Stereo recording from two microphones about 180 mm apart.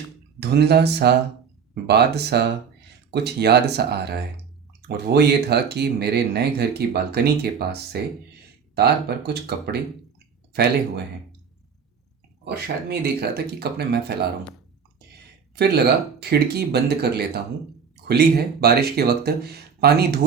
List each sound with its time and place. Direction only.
0.3 s speech: 65° right (ahead or behind)
12.5 s speech: 65° right (ahead or behind)
15.5 s speech: 65° right (ahead or behind)